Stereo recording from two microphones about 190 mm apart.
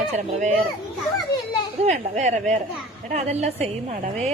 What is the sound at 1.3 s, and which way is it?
Speech, 60° left (ahead or behind).